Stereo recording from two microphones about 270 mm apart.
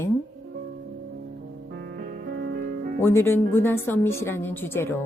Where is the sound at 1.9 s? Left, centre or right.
Right.